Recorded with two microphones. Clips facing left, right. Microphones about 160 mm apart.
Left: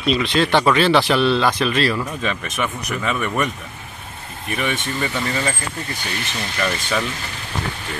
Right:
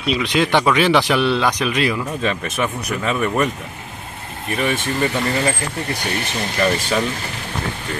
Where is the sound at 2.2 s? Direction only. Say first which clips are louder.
Right 3 dB; 35° right (ahead or behind).